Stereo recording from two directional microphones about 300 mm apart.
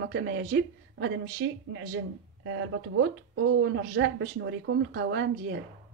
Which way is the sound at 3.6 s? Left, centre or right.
Right.